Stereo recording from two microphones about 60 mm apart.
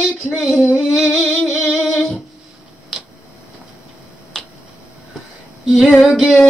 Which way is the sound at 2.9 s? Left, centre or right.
Centre.